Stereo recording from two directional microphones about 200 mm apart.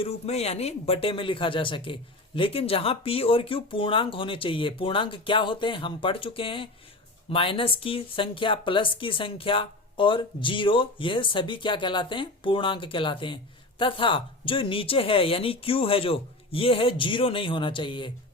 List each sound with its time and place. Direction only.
0.0 s speech: 30° left (ahead or behind)